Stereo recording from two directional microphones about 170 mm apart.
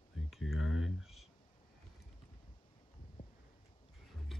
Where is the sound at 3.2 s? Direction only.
50° left (ahead or behind).